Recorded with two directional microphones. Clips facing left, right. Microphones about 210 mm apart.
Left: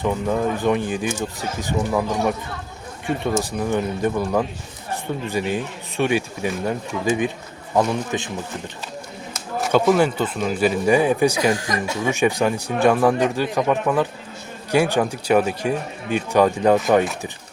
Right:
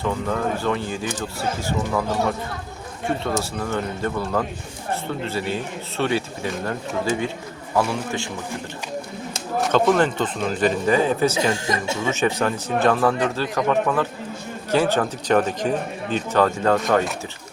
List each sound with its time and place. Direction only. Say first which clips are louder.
0.0 s speech: left 3 dB; 15° left (ahead or behind)
3.4 s speech: left 3 dB; 15° left (ahead or behind)
9.6 s speech: left 1 dB; 5° left (ahead or behind)
11.5 s speech: even; 25° right (ahead or behind)
12.0 s speech: left 3 dB; 15° left (ahead or behind)